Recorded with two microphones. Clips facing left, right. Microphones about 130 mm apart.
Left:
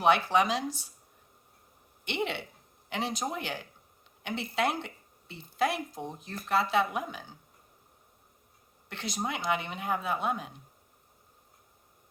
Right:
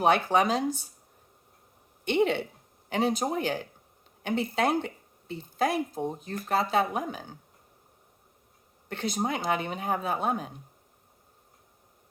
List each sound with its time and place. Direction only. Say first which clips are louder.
0.0 s speech: right 2 dB; 45° right (ahead or behind)
2.0 s speech: right 8 dB; 45° right (ahead or behind)
8.9 s speech: right 5 dB; 45° right (ahead or behind)